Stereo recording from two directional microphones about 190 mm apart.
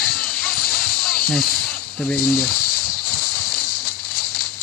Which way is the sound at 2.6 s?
50° left (ahead or behind).